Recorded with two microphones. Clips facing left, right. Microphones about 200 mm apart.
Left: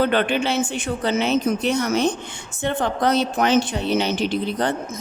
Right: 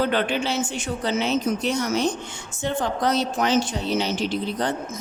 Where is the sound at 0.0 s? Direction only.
60° left (ahead or behind).